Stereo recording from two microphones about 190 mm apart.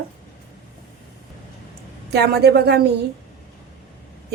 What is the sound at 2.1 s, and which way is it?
Speech, 60° right (ahead or behind).